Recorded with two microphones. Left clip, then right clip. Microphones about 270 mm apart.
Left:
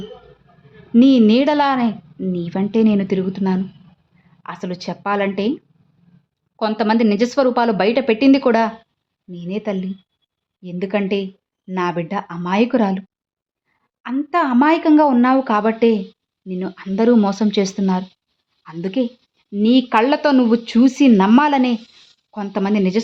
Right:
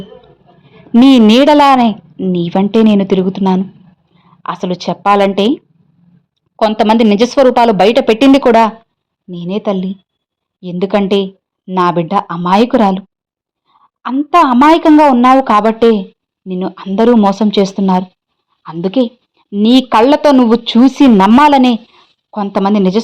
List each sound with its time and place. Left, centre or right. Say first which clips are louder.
0.9 s a woman's voice: right 7 dB; right